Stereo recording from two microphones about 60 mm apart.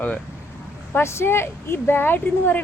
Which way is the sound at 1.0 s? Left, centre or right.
Left.